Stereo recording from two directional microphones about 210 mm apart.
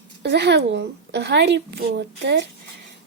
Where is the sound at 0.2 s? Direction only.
55° right (ahead or behind).